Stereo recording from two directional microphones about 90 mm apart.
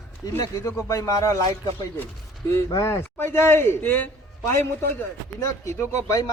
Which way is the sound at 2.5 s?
35° left (ahead or behind).